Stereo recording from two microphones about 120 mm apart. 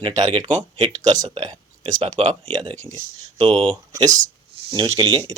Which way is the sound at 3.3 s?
50° right (ahead or behind).